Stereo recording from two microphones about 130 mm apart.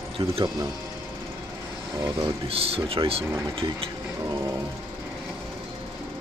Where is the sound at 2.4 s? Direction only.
45° right (ahead or behind).